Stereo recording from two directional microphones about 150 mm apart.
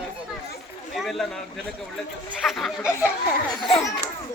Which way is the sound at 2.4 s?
Centre (ahead or behind).